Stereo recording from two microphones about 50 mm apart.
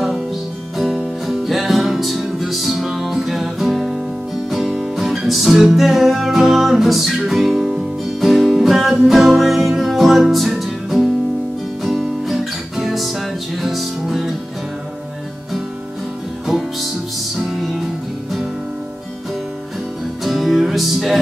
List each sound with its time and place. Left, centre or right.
1.2 s music: centre
17.5 s music: centre
20.2 s music: centre